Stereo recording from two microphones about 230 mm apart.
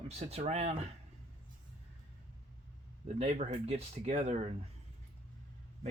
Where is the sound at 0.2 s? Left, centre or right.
Right.